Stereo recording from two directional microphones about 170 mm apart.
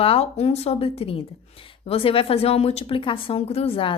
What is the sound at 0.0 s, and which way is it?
A woman's voice, 35° left (ahead or behind).